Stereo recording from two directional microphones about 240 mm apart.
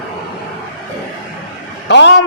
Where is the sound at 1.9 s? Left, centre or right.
Left.